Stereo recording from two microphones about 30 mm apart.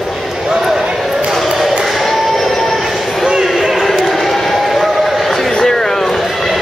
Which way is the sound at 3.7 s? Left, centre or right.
Centre.